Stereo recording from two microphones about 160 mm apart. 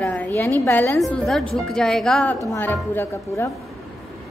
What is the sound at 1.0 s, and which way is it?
A woman's voice, centre (ahead or behind).